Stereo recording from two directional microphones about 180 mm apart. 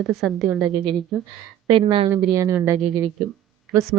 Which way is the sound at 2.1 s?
15° right (ahead or behind).